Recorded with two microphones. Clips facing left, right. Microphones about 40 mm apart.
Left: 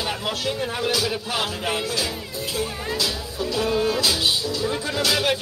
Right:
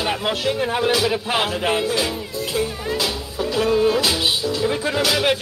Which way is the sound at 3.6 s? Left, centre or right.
Centre.